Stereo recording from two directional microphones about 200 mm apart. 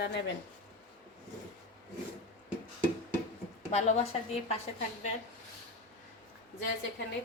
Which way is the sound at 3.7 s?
35° left (ahead or behind).